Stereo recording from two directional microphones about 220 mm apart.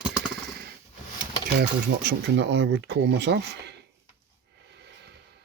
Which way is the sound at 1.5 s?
50° right (ahead or behind).